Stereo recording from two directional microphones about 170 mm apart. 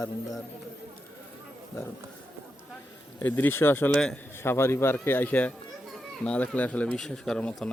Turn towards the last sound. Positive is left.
turn(degrees=5)  # may be behind; listen again after turning